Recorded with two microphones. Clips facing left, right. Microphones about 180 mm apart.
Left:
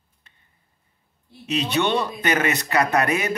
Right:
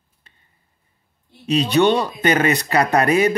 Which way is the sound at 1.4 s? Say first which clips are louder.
Right 7 dB; 35° right (ahead or behind).